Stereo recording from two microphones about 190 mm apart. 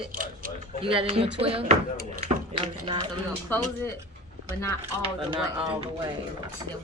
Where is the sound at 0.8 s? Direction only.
30° right (ahead or behind).